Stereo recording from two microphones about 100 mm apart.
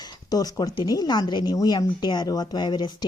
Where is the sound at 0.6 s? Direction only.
40° left (ahead or behind).